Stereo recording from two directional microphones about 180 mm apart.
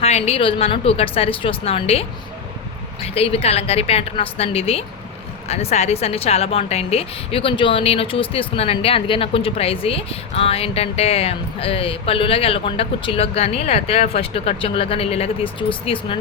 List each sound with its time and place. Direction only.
0.0 s a woman's voice: 35° left (ahead or behind)